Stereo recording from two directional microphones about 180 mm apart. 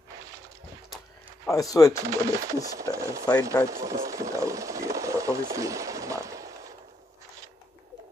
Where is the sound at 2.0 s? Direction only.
15° right (ahead or behind).